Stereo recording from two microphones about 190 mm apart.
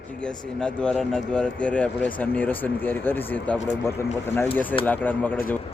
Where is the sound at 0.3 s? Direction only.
5° left (ahead or behind).